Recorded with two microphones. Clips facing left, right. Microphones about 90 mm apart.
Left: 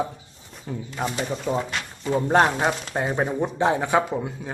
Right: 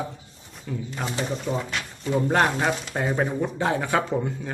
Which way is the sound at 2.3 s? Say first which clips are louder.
Left 4 dB; 20° left (ahead or behind).